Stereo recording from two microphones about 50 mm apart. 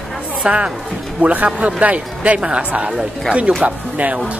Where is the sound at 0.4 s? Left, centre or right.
Right.